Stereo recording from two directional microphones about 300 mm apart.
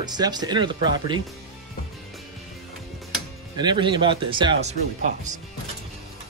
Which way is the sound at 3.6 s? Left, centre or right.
Centre.